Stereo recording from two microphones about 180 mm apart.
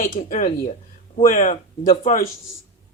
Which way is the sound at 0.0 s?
50° left (ahead or behind).